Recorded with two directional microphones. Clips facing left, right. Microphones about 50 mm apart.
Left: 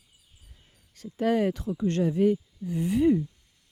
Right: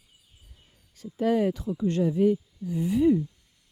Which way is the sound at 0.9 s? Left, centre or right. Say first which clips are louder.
Right 1 dB; left.